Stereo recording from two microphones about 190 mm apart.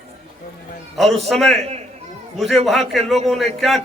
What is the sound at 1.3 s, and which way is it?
Speech, centre (ahead or behind).